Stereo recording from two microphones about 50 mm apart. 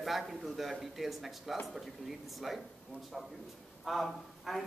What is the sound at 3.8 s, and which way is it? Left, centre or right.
Speech, centre.